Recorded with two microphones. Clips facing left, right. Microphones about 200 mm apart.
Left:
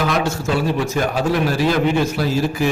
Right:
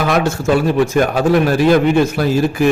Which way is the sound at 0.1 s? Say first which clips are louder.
Right 5 dB; 55° right (ahead or behind).